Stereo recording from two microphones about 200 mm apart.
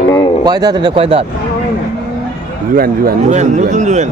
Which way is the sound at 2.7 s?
45° right (ahead or behind).